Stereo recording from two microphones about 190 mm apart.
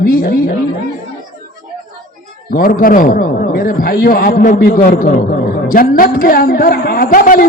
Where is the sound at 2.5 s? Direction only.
45° left (ahead or behind).